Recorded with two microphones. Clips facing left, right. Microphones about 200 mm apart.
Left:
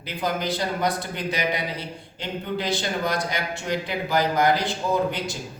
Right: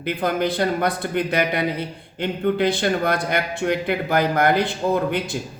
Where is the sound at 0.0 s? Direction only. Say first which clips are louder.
Right 5 dB; 55° right (ahead or behind).